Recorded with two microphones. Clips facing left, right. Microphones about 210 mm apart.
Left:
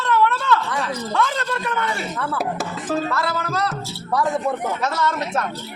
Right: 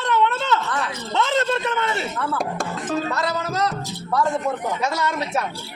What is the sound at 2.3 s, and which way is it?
Speech, 5° left (ahead or behind).